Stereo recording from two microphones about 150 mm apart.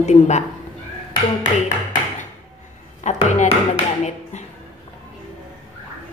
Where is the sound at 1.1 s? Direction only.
60° left (ahead or behind).